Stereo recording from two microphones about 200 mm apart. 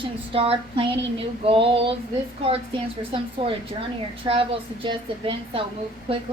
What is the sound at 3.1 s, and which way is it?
A woman's voice, 25° right (ahead or behind).